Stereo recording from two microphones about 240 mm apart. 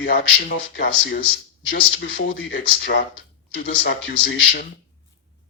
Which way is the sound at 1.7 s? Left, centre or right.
Left.